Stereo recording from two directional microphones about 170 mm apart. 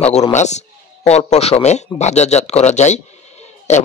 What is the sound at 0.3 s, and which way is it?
A man's voice, 40° left (ahead or behind).